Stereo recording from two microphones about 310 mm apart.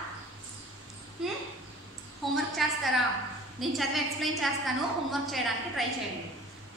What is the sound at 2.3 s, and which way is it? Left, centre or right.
A woman's voice, centre.